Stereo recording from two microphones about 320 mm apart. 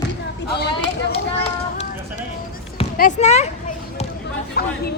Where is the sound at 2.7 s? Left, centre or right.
Left.